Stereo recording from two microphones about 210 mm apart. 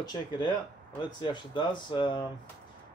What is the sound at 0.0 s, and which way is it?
Speech, 20° left (ahead or behind).